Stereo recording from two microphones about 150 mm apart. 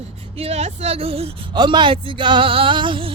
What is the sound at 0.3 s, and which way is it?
Speech, 45° right (ahead or behind).